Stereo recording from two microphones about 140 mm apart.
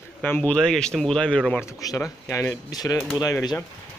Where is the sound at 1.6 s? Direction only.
25° left (ahead or behind).